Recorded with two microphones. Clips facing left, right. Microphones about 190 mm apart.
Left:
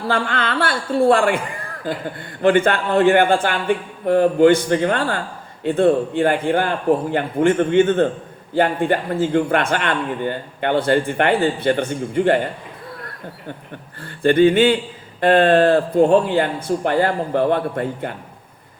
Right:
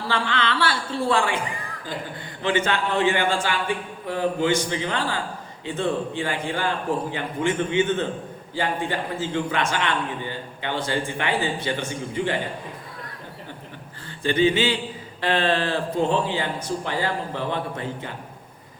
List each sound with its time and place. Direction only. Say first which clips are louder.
0.1 s a man's voice: left 3 dB; 50° left (ahead or behind)
14.2 s a man's voice: left 7 dB; 55° left (ahead or behind)